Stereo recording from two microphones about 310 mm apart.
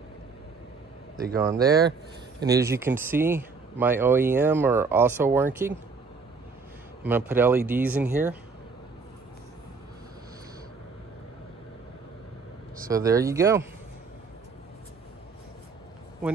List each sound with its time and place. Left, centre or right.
1.3 s speech: centre
1.6 s speech: right
2.4 s speech: centre
7.0 s speech: centre
12.9 s speech: centre